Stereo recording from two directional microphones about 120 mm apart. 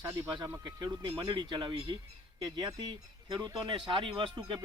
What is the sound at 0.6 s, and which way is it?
Speech, 40° right (ahead or behind).